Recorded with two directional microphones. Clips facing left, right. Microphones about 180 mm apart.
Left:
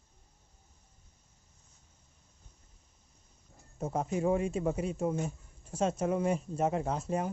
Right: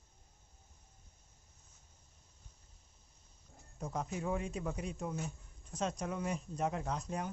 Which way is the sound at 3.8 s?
30° left (ahead or behind).